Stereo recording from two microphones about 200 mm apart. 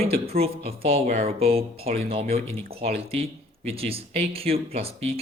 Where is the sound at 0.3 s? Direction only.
30° right (ahead or behind).